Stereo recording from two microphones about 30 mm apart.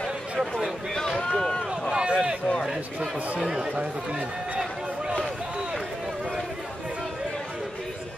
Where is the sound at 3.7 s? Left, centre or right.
Right.